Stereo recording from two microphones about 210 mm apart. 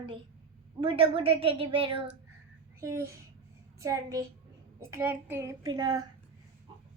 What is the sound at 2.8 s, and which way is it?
A child's voice, 15° right (ahead or behind).